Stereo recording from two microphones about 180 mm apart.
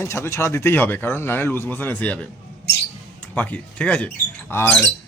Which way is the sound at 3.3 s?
5° left (ahead or behind).